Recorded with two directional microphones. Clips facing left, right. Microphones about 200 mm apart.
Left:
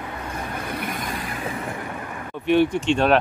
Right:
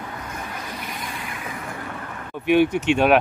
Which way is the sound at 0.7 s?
55° left (ahead or behind).